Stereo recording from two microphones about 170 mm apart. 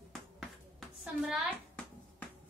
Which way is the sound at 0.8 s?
5° right (ahead or behind).